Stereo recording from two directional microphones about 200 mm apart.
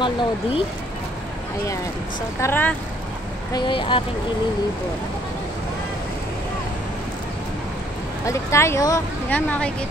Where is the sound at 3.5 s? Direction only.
25° left (ahead or behind).